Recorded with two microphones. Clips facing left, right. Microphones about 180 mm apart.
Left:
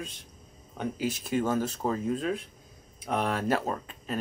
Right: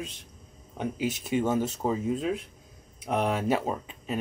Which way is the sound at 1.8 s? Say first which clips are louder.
Right 1 dB; 5° right (ahead or behind).